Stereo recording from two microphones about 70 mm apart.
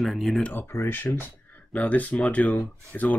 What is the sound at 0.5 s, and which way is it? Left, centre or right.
Speech, left.